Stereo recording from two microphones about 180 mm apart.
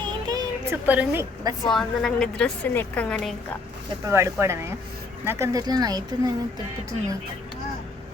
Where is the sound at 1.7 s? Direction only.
5° left (ahead or behind).